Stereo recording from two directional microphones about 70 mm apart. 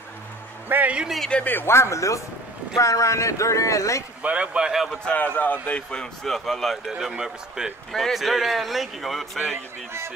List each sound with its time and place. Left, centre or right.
0.7 s a man's voice: right
0.9 s a man's voice: centre
1.3 s speech: left
4.2 s speech: centre
5.0 s a man's voice: left; by 7.7 s centre
7.9 s a man's voice: centre